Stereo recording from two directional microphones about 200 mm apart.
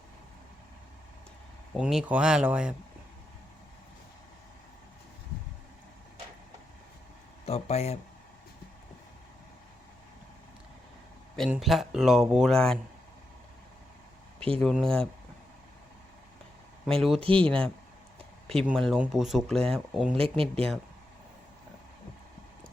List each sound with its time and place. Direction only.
1.7 s speech: centre (ahead or behind)
7.4 s speech: 30° left (ahead or behind)
11.3 s speech: centre (ahead or behind)
14.3 s speech: 5° left (ahead or behind)
16.8 s speech: centre (ahead or behind)
17.2 s speech: 25° right (ahead or behind)
18.6 s speech: centre (ahead or behind)
20.1 s speech: 25° right (ahead or behind)